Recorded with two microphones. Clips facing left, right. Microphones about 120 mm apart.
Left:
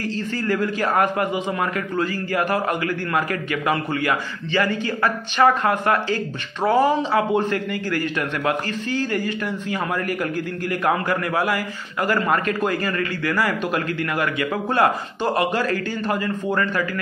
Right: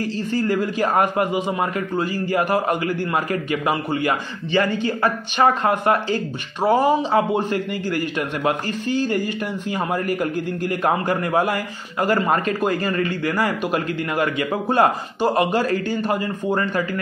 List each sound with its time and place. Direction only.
0.0 s a man's voice: 15° right (ahead or behind)
12.1 s speech: 35° right (ahead or behind)
12.7 s a man's voice: 20° right (ahead or behind)